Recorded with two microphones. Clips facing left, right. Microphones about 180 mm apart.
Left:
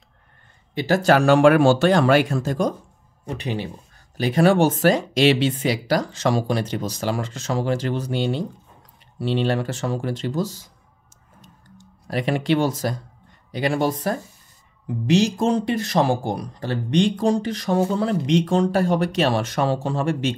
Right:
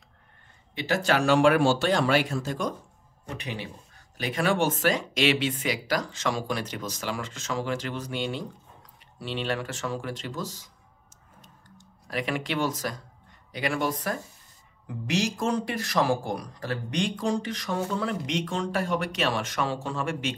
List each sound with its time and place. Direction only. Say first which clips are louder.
0.7 s speech: left 8 dB; 40° left (ahead or behind)
3.3 s speech: left 8 dB; 30° left (ahead or behind)
11.8 s speech: left 6 dB; 35° left (ahead or behind)